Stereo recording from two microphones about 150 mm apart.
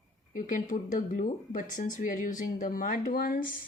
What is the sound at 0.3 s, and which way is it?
Speech, 60° left (ahead or behind).